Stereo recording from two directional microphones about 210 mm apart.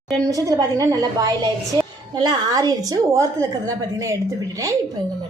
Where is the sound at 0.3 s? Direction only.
15° right (ahead or behind).